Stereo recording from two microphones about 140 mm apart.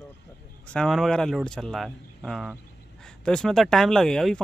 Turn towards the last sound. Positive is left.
turn(degrees=5)  # may be behind; listen again after turning